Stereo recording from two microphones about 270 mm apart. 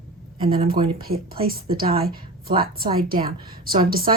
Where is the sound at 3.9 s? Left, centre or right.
Right.